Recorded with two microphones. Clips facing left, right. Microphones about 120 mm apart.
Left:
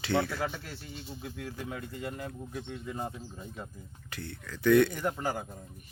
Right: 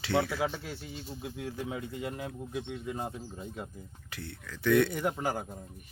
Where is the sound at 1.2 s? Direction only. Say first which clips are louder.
Right 3 dB; 20° right (ahead or behind).